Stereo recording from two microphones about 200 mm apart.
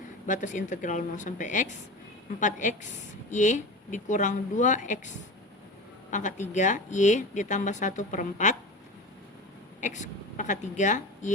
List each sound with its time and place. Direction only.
0.3 s a woman's voice: 40° left (ahead or behind)
9.8 s a woman's voice: 40° left (ahead or behind)